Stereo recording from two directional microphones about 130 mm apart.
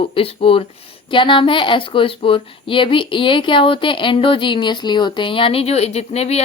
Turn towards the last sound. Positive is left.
turn(degrees=55)  # may be behind; listen again after turning